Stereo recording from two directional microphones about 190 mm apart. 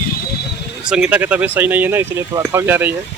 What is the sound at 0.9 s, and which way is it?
Speech, 5° right (ahead or behind).